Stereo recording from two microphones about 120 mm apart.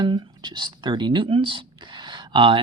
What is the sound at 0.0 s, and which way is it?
Speech, 40° right (ahead or behind).